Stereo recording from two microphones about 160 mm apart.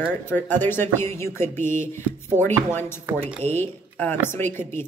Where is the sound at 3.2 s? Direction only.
45° right (ahead or behind).